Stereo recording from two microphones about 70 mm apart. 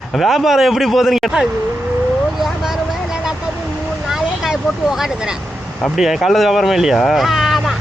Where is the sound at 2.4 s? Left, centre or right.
Centre.